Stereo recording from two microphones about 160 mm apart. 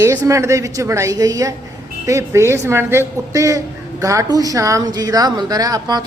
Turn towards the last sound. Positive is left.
turn(degrees=-25)  # may be behind; listen again after turning